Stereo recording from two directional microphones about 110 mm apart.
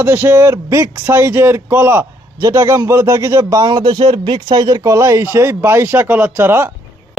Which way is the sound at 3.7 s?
45° right (ahead or behind).